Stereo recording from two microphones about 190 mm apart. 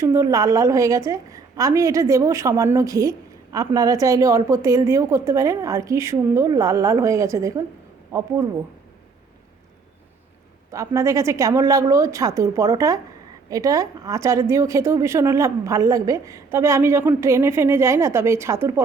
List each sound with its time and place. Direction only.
0.0 s a woman's voice: 15° right (ahead or behind)
10.7 s a woman's voice: 15° right (ahead or behind)